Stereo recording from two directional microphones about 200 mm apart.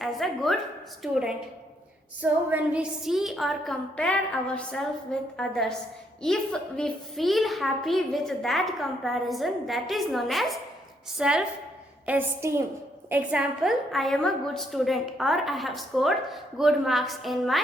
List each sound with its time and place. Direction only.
0.0 s a woman's voice: centre (ahead or behind)